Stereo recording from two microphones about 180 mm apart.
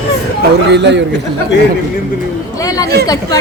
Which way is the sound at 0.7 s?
75° right (ahead or behind).